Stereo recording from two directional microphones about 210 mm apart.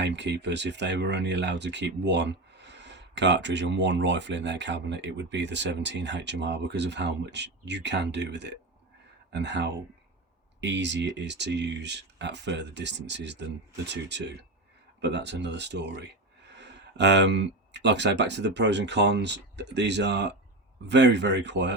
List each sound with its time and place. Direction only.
0.0 s speech: 55° right (ahead or behind)